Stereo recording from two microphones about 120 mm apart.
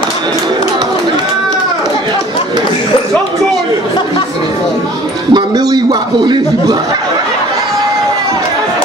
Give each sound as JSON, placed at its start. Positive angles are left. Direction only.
{"t": 5.3, "sound": "a man's voice", "side_deg": -35}